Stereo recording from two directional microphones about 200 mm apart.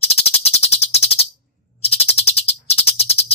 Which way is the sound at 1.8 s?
30° left (ahead or behind).